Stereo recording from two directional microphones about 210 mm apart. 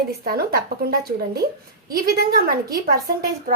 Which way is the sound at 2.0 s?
45° right (ahead or behind).